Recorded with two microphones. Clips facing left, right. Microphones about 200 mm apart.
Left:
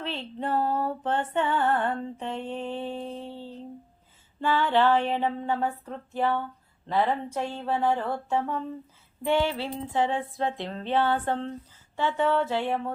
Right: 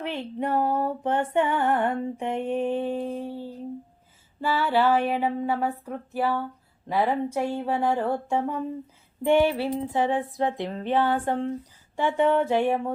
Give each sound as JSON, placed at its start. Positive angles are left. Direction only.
{"t": 0.0, "sound": "music", "side_deg": -15}